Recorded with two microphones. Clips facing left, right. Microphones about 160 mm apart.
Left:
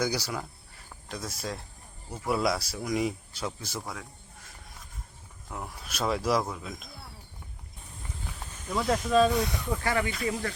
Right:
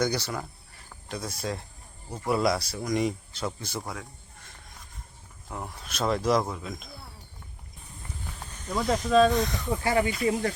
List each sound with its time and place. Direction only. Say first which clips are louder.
0.0 s speech: right 2 dB; 5° left (ahead or behind)
5.5 s speech: right 1 dB; centre (ahead or behind)
8.3 s speech: right 1 dB; centre (ahead or behind)
9.8 s speech: right 4 dB; 25° right (ahead or behind)